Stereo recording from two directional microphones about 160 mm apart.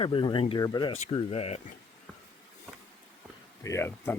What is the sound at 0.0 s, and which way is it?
Speech, 30° left (ahead or behind).